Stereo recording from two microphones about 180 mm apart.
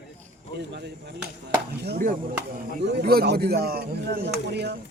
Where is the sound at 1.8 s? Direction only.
60° right (ahead or behind).